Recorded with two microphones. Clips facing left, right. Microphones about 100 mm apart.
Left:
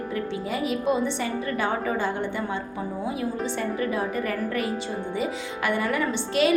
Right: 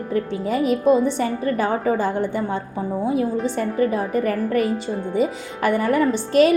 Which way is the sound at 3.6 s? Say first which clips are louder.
Right 5 dB; 40° right (ahead or behind).